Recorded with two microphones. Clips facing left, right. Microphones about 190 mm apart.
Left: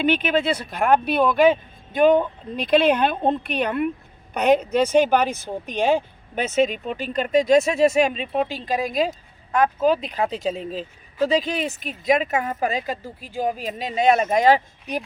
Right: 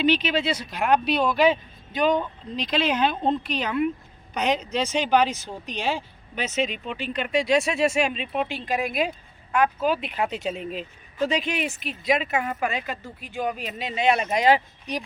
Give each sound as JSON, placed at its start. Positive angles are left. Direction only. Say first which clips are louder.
{"t": 0.0, "sound": "speech", "louder": "left 2 dB", "side_deg": 55}